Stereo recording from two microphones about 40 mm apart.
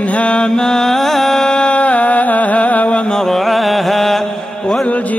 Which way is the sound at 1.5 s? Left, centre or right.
Left.